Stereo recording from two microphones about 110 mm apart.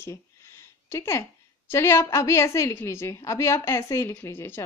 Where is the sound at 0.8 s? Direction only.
25° left (ahead or behind).